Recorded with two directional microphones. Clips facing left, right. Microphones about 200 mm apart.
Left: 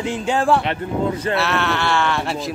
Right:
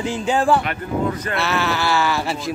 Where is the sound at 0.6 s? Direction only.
30° left (ahead or behind).